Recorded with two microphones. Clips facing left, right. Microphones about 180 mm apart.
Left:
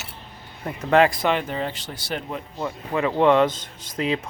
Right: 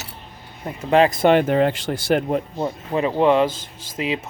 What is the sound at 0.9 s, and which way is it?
Speech, 25° right (ahead or behind).